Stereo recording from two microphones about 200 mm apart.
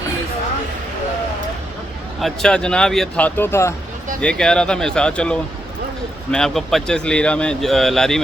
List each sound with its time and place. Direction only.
2.2 s speech: 5° left (ahead or behind)